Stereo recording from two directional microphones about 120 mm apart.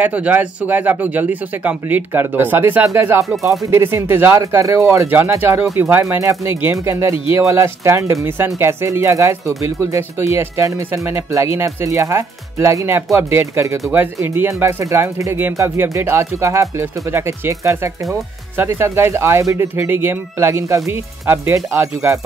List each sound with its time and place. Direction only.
0.0 s speech: 15° right (ahead or behind)